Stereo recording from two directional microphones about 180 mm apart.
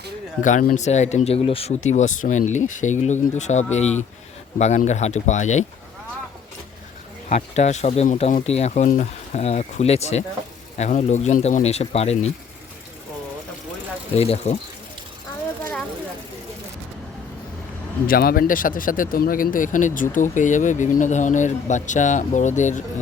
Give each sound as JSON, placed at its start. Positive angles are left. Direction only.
{"t": 0.4, "sound": "speech", "side_deg": 45}
{"t": 7.3, "sound": "speech", "side_deg": 40}
{"t": 14.2, "sound": "speech", "side_deg": 35}
{"t": 18.0, "sound": "speech", "side_deg": 55}